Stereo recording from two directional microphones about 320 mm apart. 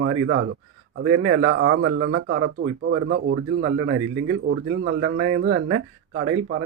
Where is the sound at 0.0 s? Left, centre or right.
Right.